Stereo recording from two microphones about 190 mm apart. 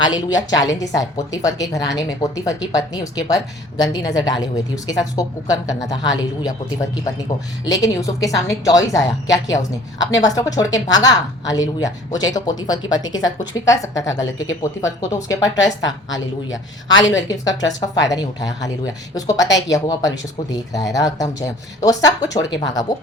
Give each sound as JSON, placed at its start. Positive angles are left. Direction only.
{"t": 0.3, "sound": "a woman's voice", "side_deg": 20}
{"t": 7.6, "sound": "a woman's voice", "side_deg": 20}